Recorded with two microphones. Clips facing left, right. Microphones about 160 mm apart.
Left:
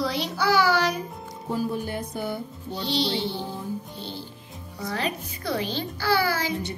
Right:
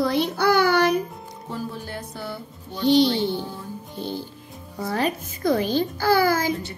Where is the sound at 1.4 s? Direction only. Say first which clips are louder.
Left 5 dB; 15° left (ahead or behind).